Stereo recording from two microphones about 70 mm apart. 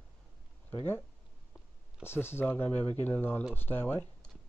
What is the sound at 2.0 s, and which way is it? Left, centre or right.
Speech, left.